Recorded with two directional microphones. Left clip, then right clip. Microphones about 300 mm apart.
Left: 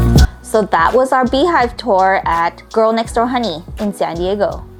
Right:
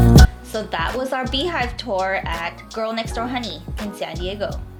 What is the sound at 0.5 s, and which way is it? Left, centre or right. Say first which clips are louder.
Speech: left 15 dB; left.